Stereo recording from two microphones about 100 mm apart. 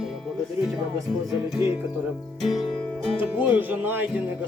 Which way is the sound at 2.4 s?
Centre (ahead or behind).